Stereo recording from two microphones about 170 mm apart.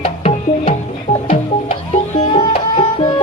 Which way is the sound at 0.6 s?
50° left (ahead or behind).